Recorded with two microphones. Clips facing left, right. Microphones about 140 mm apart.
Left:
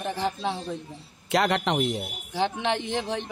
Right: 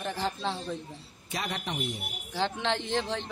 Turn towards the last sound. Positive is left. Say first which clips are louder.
# left 2 dB
turn(degrees=15)  # may be behind; listen again after turning